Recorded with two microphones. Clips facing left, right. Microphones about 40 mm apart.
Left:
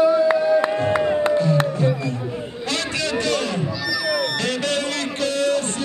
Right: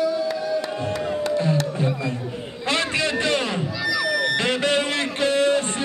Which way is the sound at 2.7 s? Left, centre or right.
Right.